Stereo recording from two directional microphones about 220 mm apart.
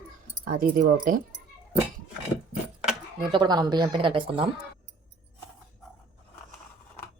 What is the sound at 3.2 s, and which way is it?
Speech, 20° right (ahead or behind).